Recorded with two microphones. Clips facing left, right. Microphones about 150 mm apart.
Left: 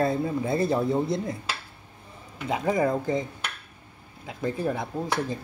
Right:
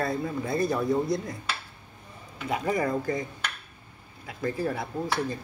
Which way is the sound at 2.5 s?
20° left (ahead or behind).